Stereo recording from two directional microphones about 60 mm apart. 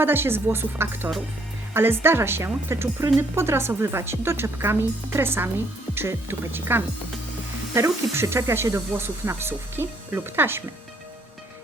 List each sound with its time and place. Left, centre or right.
0.0 s speech: right
8.1 s speech: right